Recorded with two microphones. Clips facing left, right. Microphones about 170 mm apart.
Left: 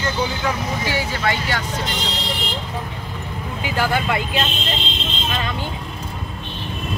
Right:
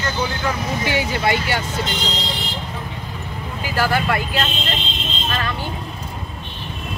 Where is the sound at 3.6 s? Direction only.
20° left (ahead or behind).